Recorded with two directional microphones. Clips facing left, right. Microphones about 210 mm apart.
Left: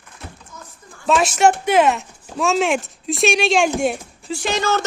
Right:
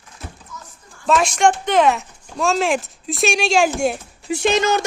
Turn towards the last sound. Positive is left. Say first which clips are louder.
# right 3 dB
turn(degrees=-20)  # may be behind; listen again after turning